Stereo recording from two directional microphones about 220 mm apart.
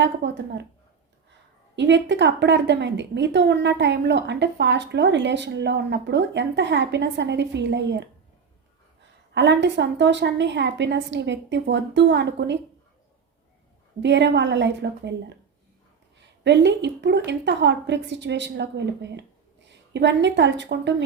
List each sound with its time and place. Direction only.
0.0 s a woman's voice: 55° right (ahead or behind)
1.7 s a woman's voice: 55° right (ahead or behind)
9.3 s a woman's voice: 50° right (ahead or behind)
14.0 s a woman's voice: 50° right (ahead or behind)
16.4 s a woman's voice: 50° right (ahead or behind)